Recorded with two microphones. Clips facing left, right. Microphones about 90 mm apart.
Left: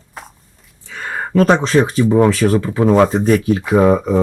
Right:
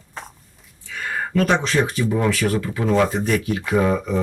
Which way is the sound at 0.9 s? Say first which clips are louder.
Left 4 dB; 35° left (ahead or behind).